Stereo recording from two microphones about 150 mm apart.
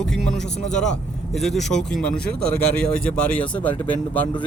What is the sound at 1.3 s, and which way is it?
Speech, centre (ahead or behind).